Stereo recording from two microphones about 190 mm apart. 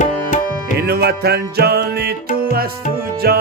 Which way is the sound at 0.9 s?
60° right (ahead or behind).